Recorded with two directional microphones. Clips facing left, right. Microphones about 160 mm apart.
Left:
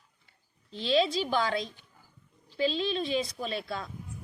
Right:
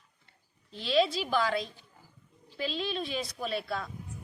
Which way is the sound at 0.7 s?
5° right (ahead or behind).